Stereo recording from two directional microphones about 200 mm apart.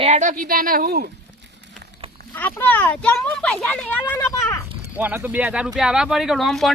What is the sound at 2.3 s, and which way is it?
Speech, 10° left (ahead or behind).